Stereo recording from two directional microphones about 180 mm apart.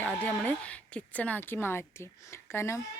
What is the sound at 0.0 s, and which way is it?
Speech, 10° left (ahead or behind).